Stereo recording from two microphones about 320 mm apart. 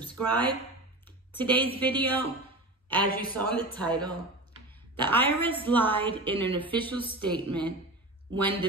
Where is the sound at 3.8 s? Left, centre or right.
Centre.